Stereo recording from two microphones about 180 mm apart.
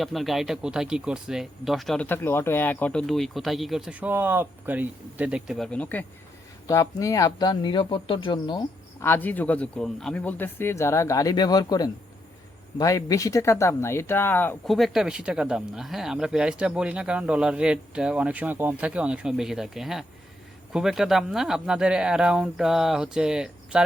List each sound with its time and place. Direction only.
0.0 s speech: centre (ahead or behind); by 8.6 s 25° left (ahead or behind)
9.0 s a man's voice: 10° left (ahead or behind)
14.7 s speech: centre (ahead or behind)